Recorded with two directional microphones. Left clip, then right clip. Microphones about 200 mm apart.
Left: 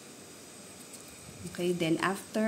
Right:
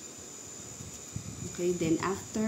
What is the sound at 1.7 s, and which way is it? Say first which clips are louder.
Speech: even; 35° left (ahead or behind).